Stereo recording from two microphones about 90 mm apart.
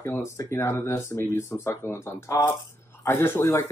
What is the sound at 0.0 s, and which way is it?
Speech, 30° left (ahead or behind).